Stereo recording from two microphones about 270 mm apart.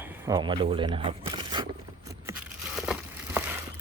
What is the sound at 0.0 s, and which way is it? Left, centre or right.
Speech, centre.